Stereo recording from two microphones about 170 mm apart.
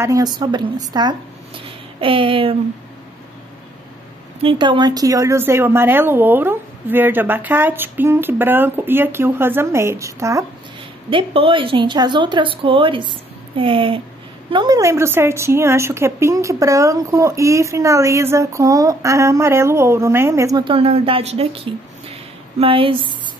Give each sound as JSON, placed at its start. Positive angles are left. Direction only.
{"t": 0.0, "sound": "speech", "side_deg": -20}
{"t": 4.4, "sound": "a woman's voice", "side_deg": -30}
{"t": 11.1, "sound": "a woman's voice", "side_deg": -30}
{"t": 20.6, "sound": "a woman's voice", "side_deg": -35}